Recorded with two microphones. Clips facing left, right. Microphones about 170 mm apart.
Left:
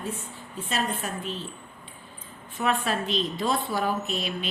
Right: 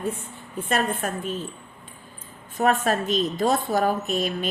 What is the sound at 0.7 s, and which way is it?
Speech, 50° right (ahead or behind).